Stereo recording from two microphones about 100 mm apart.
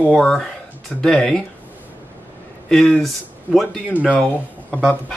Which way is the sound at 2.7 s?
5° left (ahead or behind).